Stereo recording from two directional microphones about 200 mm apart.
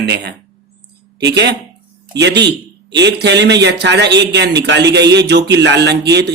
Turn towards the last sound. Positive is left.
turn(degrees=-55)  # may be behind; listen again after turning